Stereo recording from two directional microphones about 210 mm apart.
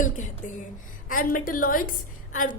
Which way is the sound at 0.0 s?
40° left (ahead or behind).